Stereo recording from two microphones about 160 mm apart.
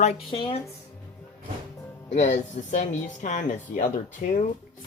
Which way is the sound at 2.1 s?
50° left (ahead or behind).